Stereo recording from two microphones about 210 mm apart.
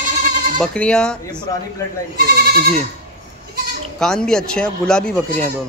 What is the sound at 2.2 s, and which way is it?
Goat, 45° right (ahead or behind).